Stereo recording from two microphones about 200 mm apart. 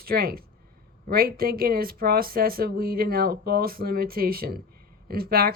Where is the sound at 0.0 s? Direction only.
50° right (ahead or behind).